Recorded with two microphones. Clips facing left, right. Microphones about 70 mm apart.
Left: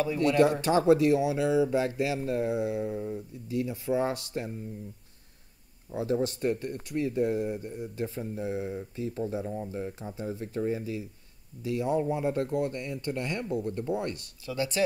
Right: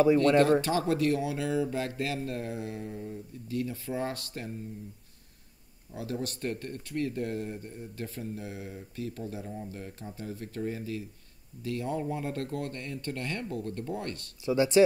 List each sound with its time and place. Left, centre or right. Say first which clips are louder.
0.7 s speech: left 5 dB; left
5.9 s speech: left 7 dB; left
14.4 s speech: right 6 dB; right